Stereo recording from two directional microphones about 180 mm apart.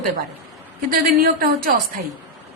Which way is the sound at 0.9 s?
55° right (ahead or behind).